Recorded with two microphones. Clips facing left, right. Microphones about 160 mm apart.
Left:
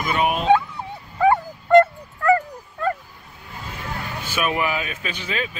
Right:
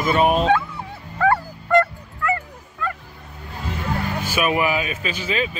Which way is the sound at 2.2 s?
35° left (ahead or behind).